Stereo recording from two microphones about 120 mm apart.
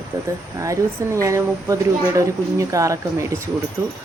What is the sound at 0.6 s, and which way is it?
Speech, 25° right (ahead or behind).